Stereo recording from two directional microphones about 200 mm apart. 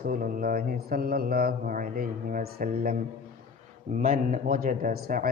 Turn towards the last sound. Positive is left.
turn(degrees=-45)  # may be behind; listen again after turning